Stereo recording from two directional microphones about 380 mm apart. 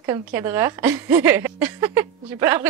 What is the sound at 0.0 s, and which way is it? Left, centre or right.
A woman's voice, centre.